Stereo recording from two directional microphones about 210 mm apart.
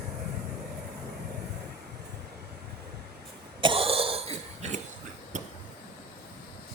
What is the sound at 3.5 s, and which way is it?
Cough, 25° right (ahead or behind).